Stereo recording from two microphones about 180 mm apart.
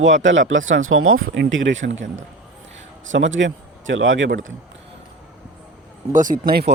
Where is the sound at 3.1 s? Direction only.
90° right.